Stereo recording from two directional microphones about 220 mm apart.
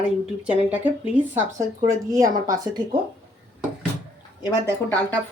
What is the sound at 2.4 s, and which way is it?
Speech, 15° right (ahead or behind).